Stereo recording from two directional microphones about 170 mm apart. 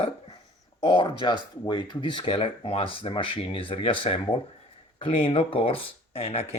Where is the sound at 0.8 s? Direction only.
30° left (ahead or behind).